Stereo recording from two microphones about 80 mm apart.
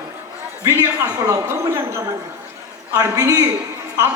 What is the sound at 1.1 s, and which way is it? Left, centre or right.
Speech, right.